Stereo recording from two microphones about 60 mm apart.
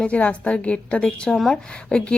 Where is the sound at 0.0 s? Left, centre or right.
Left.